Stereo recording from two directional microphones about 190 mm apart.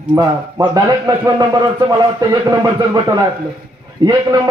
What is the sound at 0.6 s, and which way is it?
A man's voice, 20° right (ahead or behind).